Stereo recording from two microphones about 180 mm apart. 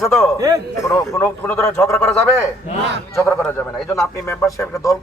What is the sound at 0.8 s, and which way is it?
A man's voice, 15° left (ahead or behind).